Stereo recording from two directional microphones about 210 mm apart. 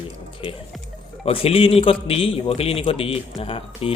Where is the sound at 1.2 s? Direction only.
30° left (ahead or behind).